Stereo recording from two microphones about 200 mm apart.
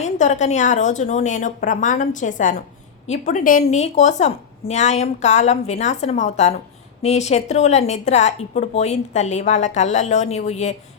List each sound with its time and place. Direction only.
0.0 s a woman's voice: 35° left (ahead or behind)